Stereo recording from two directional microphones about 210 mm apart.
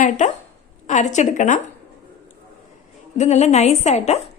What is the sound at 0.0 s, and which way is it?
Speech, 35° left (ahead or behind).